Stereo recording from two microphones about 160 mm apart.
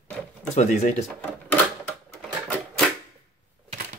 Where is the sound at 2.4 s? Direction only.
Centre (ahead or behind).